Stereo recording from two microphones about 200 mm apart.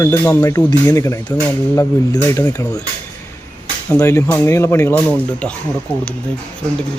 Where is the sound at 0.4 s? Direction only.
15° left (ahead or behind).